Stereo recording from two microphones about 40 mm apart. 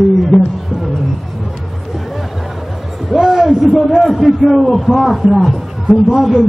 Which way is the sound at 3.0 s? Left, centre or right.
Centre.